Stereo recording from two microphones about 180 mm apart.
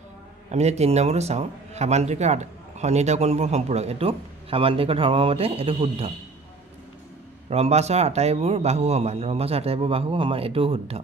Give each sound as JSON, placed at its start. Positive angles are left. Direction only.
{"t": 0.5, "sound": "a man's voice", "side_deg": -35}
{"t": 7.4, "sound": "a man's voice", "side_deg": -35}